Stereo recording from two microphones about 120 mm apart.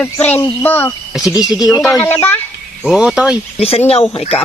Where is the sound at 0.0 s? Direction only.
15° left (ahead or behind).